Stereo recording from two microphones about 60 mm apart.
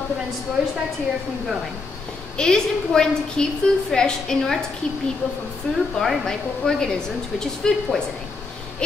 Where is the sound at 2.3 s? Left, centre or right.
Centre.